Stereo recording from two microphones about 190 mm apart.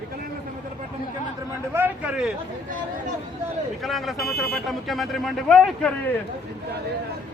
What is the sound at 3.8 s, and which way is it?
A man's voice, centre (ahead or behind).